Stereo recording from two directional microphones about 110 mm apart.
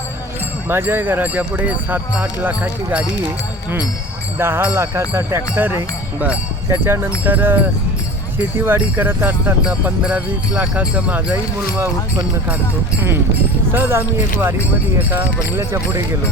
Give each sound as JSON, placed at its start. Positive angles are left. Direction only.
{"t": 0.7, "sound": "speech", "side_deg": -20}
{"t": 4.4, "sound": "speech", "side_deg": -20}
{"t": 13.7, "sound": "speech", "side_deg": -20}